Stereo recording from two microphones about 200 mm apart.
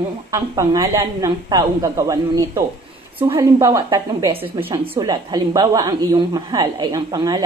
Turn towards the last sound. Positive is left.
turn(degrees=-20)  # may be behind; listen again after turning